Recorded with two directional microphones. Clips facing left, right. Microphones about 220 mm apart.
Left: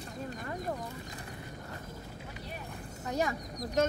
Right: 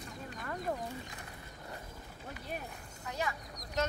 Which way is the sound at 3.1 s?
45° left (ahead or behind).